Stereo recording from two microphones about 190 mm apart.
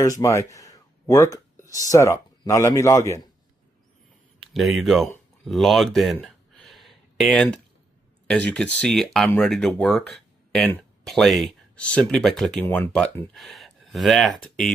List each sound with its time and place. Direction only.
0.0 s speech: 15° left (ahead or behind)
4.4 s speech: centre (ahead or behind)
5.4 s a sound: centre (ahead or behind)
8.3 s speech: 5° left (ahead or behind)